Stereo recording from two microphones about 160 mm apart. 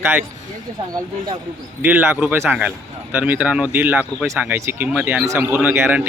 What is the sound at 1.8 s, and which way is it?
Speech, 10° right (ahead or behind).